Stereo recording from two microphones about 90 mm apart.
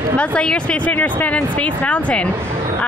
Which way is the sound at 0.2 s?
10° left (ahead or behind).